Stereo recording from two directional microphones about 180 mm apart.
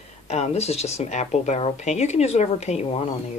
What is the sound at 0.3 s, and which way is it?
Speech, 35° left (ahead or behind).